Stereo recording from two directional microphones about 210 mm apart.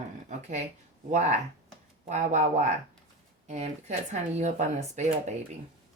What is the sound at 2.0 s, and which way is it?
Speech, 35° right (ahead or behind).